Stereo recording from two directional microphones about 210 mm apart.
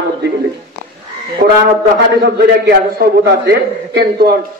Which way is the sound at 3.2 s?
50° right (ahead or behind).